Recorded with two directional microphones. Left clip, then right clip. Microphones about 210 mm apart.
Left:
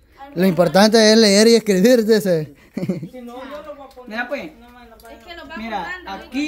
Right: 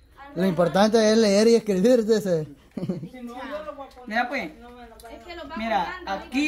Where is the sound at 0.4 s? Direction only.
35° left (ahead or behind).